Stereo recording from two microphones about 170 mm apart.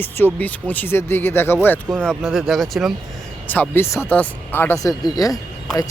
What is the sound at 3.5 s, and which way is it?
Speech, 10° left (ahead or behind).